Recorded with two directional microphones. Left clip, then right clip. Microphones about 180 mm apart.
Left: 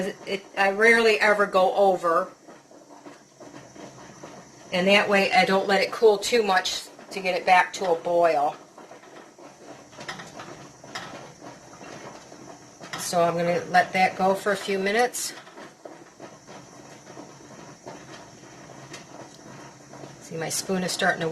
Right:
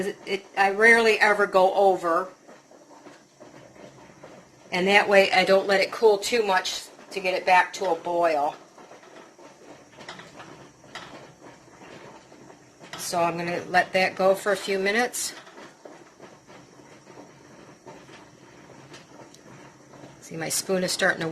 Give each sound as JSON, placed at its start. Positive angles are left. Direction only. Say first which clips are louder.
{"t": 0.0, "sound": "speech", "louder": "right 1 dB", "side_deg": -55}
{"t": 4.7, "sound": "speech", "louder": "right 1 dB", "side_deg": -55}
{"t": 13.1, "sound": "speech", "louder": "left 3 dB", "side_deg": -40}
{"t": 20.2, "sound": "speech", "louder": "even", "side_deg": -45}